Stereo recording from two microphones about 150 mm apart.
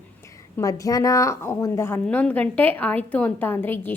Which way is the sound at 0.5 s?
20° left (ahead or behind).